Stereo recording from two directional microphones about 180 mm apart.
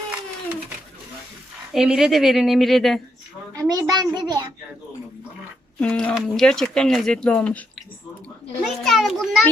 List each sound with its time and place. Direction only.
1.7 s speech: centre (ahead or behind)
3.5 s a child's voice: 20° right (ahead or behind)
5.8 s speech: 5° left (ahead or behind)
8.6 s speech: centre (ahead or behind)